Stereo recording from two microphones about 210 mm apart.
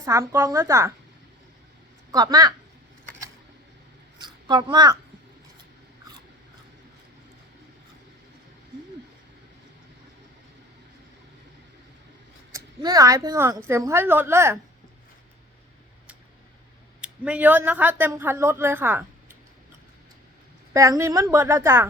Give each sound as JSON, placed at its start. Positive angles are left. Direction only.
{"t": 0.0, "sound": "a woman's voice", "side_deg": -15}
{"t": 2.1, "sound": "a woman's voice", "side_deg": -15}
{"t": 4.2, "sound": "a sound", "side_deg": -20}
{"t": 12.5, "sound": "a woman's voice", "side_deg": -15}
{"t": 17.0, "sound": "speech", "side_deg": -5}
{"t": 20.7, "sound": "a woman's voice", "side_deg": -15}